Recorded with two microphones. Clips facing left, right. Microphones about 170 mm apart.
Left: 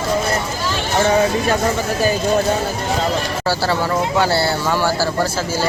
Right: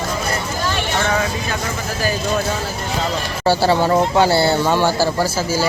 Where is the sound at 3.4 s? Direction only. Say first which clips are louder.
Right 6 dB; 20° right (ahead or behind).